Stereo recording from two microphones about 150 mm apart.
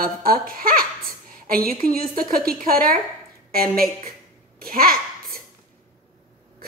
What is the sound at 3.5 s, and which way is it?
A woman's voice, 80° right.